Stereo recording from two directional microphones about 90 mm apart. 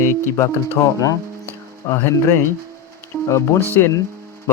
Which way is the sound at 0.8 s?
40° left (ahead or behind).